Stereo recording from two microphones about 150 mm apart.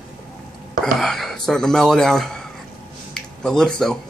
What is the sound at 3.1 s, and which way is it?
Speech, 5° left (ahead or behind).